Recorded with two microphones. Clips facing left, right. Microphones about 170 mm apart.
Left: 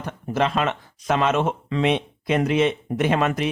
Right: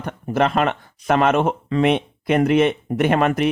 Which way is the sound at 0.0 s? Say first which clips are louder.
Right 3 dB; 55° right (ahead or behind).